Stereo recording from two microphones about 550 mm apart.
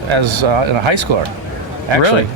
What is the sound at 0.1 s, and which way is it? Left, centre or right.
Speech, right.